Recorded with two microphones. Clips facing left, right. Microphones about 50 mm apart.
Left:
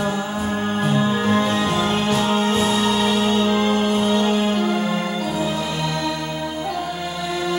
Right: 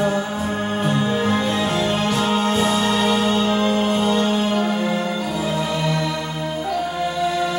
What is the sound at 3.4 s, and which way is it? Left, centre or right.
Music, centre.